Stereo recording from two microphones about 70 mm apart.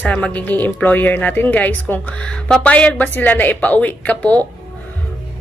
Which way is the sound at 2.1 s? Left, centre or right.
Centre.